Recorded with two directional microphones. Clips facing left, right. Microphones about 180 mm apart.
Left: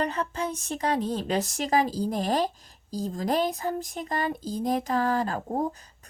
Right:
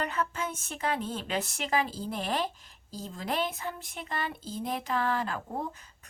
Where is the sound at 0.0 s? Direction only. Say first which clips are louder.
Left 4 dB; 35° left (ahead or behind).